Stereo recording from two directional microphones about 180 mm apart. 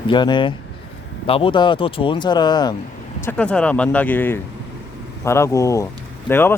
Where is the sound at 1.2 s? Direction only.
30° left (ahead or behind).